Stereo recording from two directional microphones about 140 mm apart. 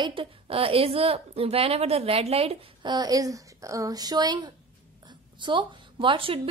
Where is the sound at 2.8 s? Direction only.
30° right (ahead or behind).